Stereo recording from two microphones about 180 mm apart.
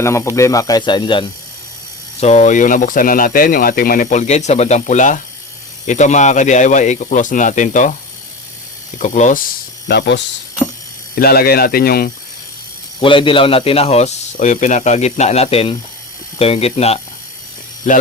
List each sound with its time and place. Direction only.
0.0 s speech: 15° left (ahead or behind)
2.2 s speech: 40° left (ahead or behind)
9.0 s speech: 40° left (ahead or behind)
9.9 s speech: 75° left (ahead or behind)
11.1 s speech: 55° left (ahead or behind)
13.0 s speech: 30° left (ahead or behind)